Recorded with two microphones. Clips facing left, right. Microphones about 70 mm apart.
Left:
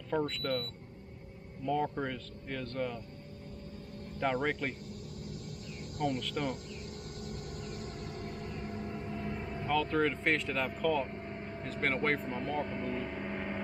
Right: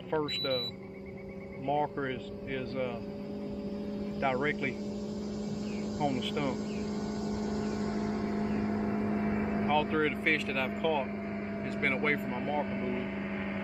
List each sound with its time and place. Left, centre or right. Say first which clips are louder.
0.1 s speech: right 1 dB; centre
1.7 s speech: right 2 dB; centre
4.2 s speech: right 1 dB; centre
5.9 s speech: right 1 dB; centre
7.2 s vehicle: right 9 dB; right
9.7 s speech: even; centre